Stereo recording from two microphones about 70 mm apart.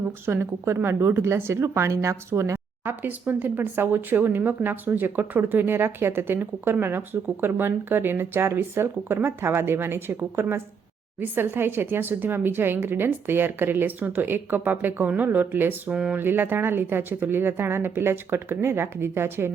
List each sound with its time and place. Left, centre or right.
0.3 s a woman's voice: right
15.9 s speech: centre
16.1 s a woman's voice: right